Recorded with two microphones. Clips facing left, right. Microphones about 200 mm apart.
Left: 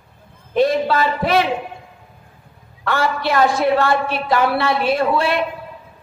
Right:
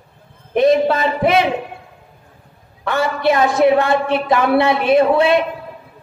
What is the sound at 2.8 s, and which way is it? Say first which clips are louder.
A woman's voice: right 3 dB; 20° right (ahead or behind).